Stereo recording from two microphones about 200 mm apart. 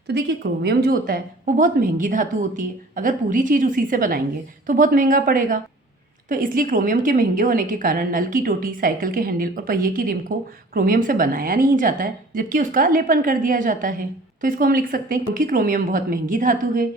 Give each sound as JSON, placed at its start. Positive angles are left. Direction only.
{"t": 0.1, "sound": "a woman's voice", "side_deg": -60}